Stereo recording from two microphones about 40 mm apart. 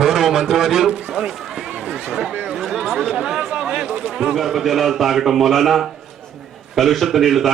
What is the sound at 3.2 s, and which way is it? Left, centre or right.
Chatter, centre.